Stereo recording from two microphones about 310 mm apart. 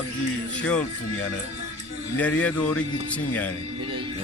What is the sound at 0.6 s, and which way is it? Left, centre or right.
Speech, centre.